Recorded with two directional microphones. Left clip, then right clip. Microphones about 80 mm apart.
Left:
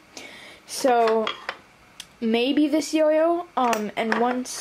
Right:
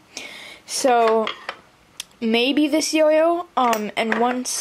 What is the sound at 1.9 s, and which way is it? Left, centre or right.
Speech, right.